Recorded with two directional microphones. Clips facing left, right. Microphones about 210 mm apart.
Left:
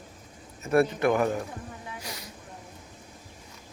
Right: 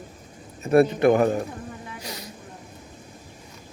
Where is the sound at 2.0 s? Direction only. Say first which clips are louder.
Right 4 dB; 20° right (ahead or behind).